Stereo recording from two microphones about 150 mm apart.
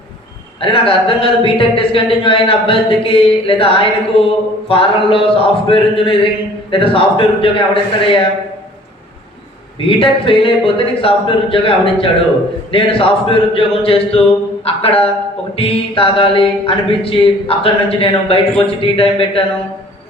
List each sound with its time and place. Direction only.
0.6 s speech: 40° left (ahead or behind)
9.8 s speech: 35° left (ahead or behind)